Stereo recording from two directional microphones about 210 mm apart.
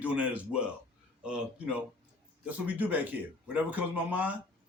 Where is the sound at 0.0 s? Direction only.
5° right (ahead or behind).